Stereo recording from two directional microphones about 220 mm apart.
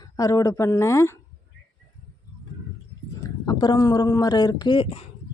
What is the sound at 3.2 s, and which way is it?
Speech, 20° left (ahead or behind).